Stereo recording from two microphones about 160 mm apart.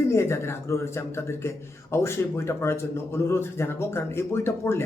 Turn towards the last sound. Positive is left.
turn(degrees=15)  # may be behind; listen again after turning